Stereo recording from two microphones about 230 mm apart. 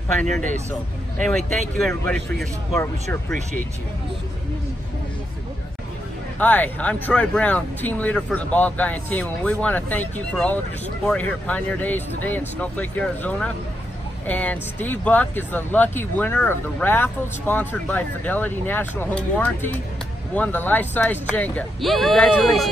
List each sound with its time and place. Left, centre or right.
0.7 s a man's voice: centre
6.4 s a man's voice: centre